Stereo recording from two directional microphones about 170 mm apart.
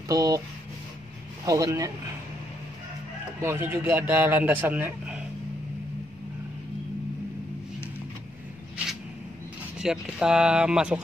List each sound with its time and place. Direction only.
0.1 s speech: 20° right (ahead or behind)
1.4 s speech: 20° right (ahead or behind)
3.3 s a man's voice: 15° right (ahead or behind)
9.8 s speech: 5° right (ahead or behind)